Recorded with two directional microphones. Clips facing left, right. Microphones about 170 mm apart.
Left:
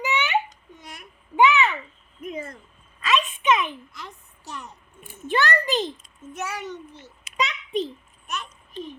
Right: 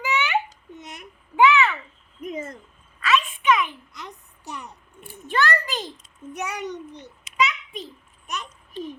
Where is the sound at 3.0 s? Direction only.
20° left (ahead or behind).